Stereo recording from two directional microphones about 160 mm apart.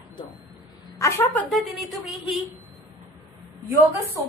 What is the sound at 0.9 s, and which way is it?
Speech, 15° left (ahead or behind).